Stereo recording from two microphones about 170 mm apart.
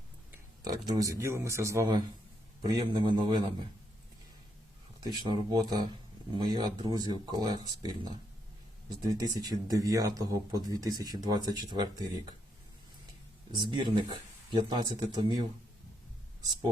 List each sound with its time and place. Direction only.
0.6 s speech: 20° right (ahead or behind)
5.2 s speech: 25° right (ahead or behind)
13.5 s speech: 30° right (ahead or behind)